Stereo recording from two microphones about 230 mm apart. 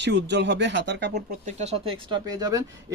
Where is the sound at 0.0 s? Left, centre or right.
Right.